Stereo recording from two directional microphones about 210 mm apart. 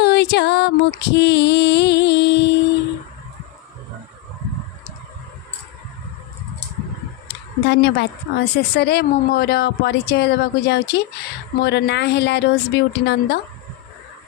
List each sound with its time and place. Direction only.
0.0 s music: 55° left (ahead or behind)
7.3 s a woman's voice: 55° left (ahead or behind)